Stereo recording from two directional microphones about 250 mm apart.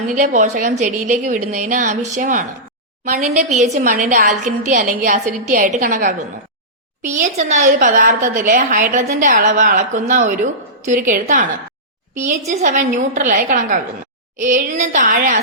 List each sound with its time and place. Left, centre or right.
0.1 s a woman's voice: right
12.5 s a woman's voice: right